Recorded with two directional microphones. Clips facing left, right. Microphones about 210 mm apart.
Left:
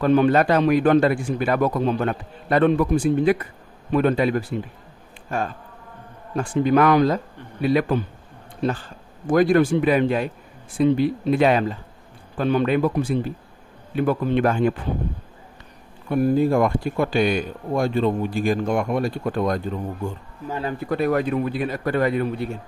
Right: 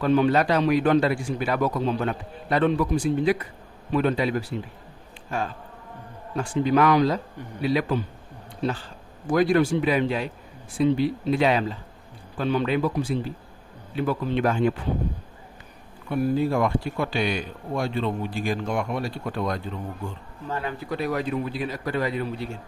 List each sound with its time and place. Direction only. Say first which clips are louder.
0.0 s speech: left 3 dB; 55° left (ahead or behind)
6.3 s speech: left 3 dB; 50° left (ahead or behind)
9.3 s speech: left 3 dB; 50° left (ahead or behind)
16.1 s speech: left 5 dB; 45° left (ahead or behind)
20.9 s a man's voice: left 6 dB; 55° left (ahead or behind)